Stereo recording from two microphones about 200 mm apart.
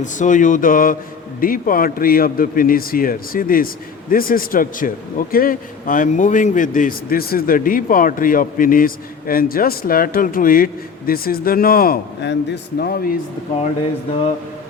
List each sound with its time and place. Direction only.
0.0 s a man's voice: 40° left (ahead or behind)